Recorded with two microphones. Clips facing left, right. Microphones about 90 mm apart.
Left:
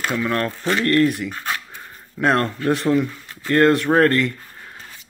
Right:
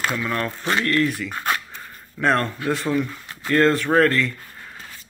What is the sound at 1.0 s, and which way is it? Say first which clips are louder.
Speech: left 2 dB; 15° left (ahead or behind).